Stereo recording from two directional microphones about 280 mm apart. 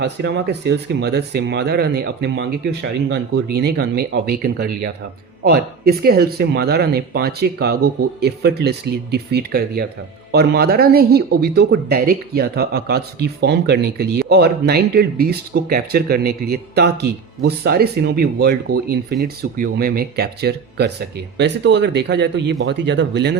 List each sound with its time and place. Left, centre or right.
0.0 s speech: right